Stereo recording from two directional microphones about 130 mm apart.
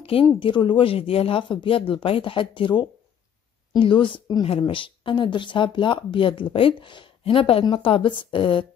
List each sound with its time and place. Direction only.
0.0 s speech: 45° left (ahead or behind)